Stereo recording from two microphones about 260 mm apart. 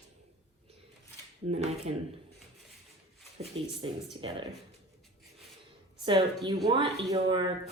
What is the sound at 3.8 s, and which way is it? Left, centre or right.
Speech, centre.